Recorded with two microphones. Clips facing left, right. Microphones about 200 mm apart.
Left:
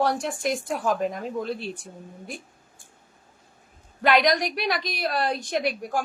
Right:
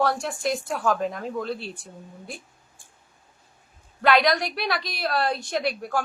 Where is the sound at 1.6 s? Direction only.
45° left (ahead or behind).